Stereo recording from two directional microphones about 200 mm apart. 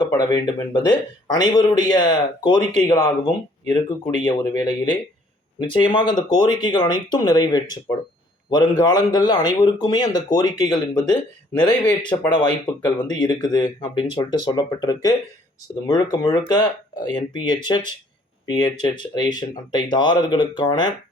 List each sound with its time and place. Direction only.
0.0 s speech: 20° left (ahead or behind)
4.3 s a man's voice: 20° left (ahead or behind)